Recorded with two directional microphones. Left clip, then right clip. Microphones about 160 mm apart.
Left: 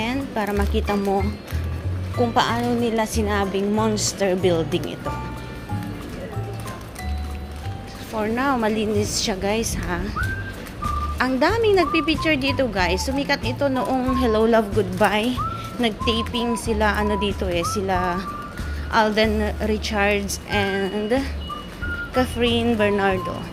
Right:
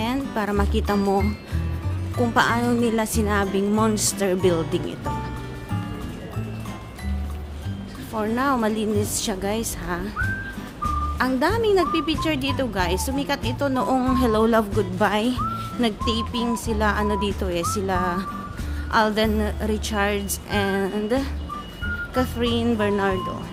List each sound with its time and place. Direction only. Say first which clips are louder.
0.0 s speech: left 1 dB; 25° right (ahead or behind)
2.3 s speech: right 2 dB; 30° right (ahead or behind)
8.1 s a woman's voice: left 1 dB; 15° right (ahead or behind)
11.2 s speech: left 3 dB; 15° right (ahead or behind)